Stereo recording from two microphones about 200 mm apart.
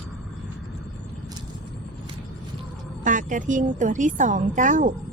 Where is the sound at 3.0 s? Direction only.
40° right (ahead or behind).